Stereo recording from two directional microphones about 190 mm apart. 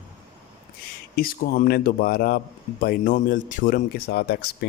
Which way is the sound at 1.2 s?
50° left (ahead or behind).